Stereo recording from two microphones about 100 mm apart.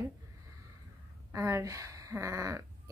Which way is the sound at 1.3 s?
30° right (ahead or behind).